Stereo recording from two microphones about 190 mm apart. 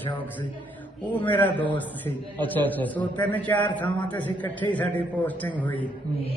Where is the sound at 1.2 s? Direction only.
10° left (ahead or behind).